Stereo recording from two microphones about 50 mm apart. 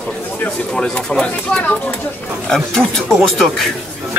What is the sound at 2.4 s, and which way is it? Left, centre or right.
Speech, centre.